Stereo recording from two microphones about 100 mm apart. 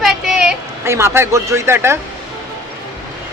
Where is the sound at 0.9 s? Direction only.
25° right (ahead or behind).